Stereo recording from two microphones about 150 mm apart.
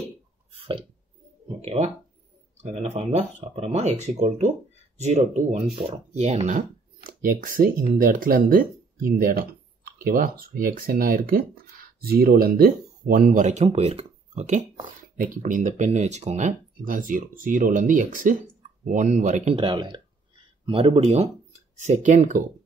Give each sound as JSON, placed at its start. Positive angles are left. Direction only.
{"t": 0.5, "sound": "burping", "side_deg": -35}
{"t": 1.6, "sound": "speech", "side_deg": -45}
{"t": 7.2, "sound": "speech", "side_deg": -75}
{"t": 15.1, "sound": "speech", "side_deg": -60}
{"t": 19.5, "sound": "speech", "side_deg": -35}
{"t": 21.7, "sound": "speech", "side_deg": -55}